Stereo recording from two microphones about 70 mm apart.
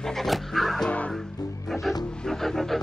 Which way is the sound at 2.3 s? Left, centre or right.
Centre.